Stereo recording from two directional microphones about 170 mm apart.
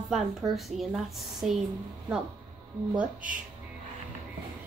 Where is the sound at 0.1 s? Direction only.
Centre (ahead or behind).